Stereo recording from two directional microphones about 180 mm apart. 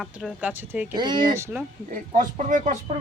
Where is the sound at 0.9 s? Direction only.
25° right (ahead or behind).